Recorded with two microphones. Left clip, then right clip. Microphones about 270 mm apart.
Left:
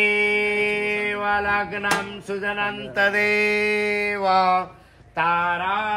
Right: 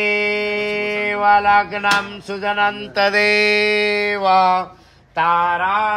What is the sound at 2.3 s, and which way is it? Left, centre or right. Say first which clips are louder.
Mantra: right 7 dB; right.